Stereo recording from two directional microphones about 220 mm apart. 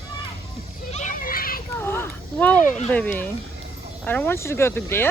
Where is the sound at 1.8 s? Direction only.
10° left (ahead or behind).